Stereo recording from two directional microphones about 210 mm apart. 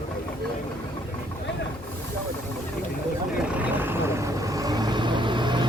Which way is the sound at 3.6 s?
10° right (ahead or behind).